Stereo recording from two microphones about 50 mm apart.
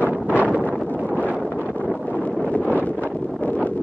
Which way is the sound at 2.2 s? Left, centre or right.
Left.